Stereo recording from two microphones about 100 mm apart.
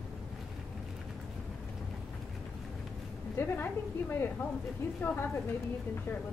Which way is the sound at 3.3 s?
20° left (ahead or behind).